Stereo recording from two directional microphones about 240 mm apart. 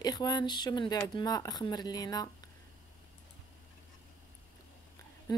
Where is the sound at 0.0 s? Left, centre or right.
Centre.